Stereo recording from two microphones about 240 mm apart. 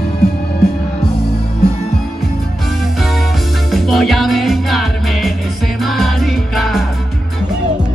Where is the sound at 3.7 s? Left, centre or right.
Centre.